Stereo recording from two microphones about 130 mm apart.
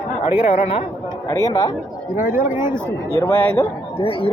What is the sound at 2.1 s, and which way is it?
Speech, 90° left.